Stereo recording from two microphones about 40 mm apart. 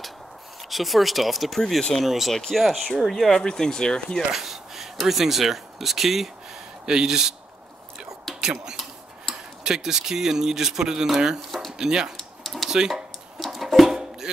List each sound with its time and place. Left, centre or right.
0.6 s speech: centre
3.3 s speech: centre
4.3 s a sound: centre
5.0 s speech: centre
8.4 s speech: centre
12.2 s typing: centre
12.6 s speech: centre
13.4 s a sound: centre